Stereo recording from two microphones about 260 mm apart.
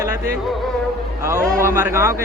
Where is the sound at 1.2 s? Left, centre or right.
Centre.